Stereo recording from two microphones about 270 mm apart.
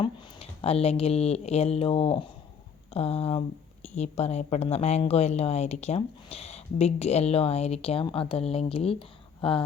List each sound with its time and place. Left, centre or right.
0.0 s a woman's voice: left